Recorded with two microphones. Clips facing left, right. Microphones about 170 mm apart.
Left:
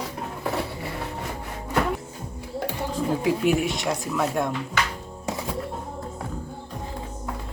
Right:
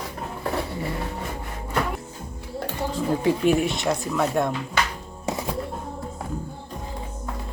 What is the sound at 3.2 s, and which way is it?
Speech, 5° left (ahead or behind).